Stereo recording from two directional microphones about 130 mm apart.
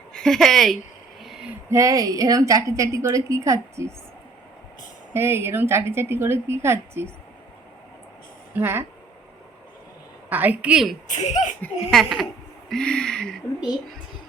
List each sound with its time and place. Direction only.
0.1 s speech: 5° left (ahead or behind)
1.2 s a sound: 5° right (ahead or behind)
1.7 s a woman's voice: 25° right (ahead or behind)
5.1 s a woman's voice: 20° right (ahead or behind)
8.5 s a woman's voice: 15° right (ahead or behind)
10.2 s a woman's voice: 10° right (ahead or behind)
11.1 s speech: 70° left (ahead or behind)
11.9 s a woman's voice: centre (ahead or behind)